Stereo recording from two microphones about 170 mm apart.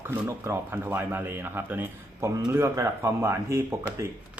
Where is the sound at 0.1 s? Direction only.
15° right (ahead or behind).